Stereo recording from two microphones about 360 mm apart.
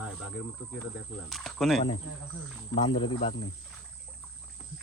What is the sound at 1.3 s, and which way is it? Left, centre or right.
Speech, centre.